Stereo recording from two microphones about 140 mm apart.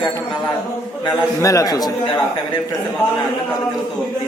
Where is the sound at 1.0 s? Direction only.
20° left (ahead or behind).